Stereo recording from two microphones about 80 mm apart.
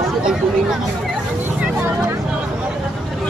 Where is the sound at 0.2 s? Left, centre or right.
Centre.